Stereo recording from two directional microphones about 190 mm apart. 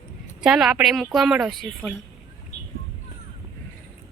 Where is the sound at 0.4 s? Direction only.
5° right (ahead or behind).